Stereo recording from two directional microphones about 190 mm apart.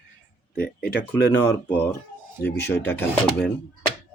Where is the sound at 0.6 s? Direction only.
55° left (ahead or behind).